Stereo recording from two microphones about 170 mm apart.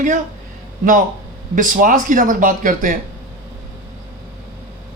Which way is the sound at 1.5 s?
50° right (ahead or behind).